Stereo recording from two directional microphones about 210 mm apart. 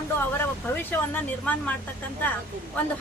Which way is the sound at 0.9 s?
10° left (ahead or behind).